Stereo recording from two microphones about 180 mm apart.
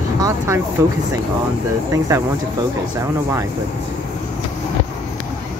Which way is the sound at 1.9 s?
15° right (ahead or behind).